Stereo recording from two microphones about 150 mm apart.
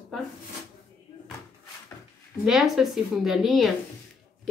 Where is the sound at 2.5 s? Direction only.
Centre (ahead or behind).